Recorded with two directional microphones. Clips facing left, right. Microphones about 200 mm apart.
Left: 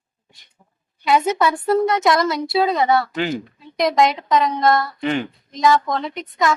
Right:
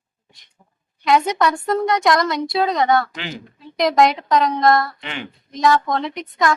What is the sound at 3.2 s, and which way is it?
Speech, 45° left (ahead or behind).